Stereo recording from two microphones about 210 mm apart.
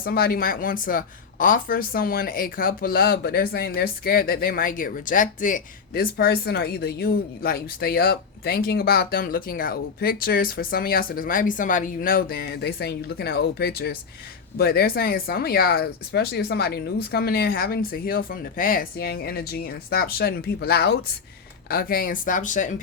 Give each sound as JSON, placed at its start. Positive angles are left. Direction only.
{"t": 0.0, "sound": "speech", "side_deg": 45}